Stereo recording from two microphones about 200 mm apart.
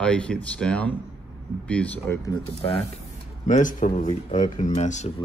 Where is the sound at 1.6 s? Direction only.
5° left (ahead or behind).